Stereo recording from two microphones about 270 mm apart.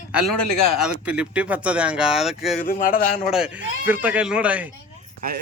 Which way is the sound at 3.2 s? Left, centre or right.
Centre.